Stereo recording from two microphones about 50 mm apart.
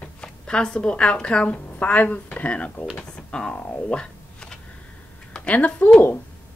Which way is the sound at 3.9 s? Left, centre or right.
Left.